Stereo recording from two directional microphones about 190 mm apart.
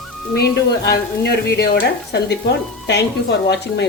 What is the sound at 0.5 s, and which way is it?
Speech, 60° left (ahead or behind).